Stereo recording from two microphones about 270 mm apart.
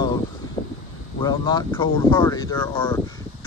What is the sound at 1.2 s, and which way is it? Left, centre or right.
Speech, centre.